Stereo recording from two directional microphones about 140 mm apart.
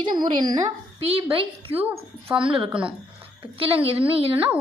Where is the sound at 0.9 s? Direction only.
45° right (ahead or behind).